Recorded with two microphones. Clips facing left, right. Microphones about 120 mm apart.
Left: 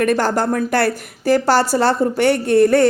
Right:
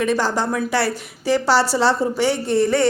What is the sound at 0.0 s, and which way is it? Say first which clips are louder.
A woman's voice: left 3 dB; 55° left (ahead or behind).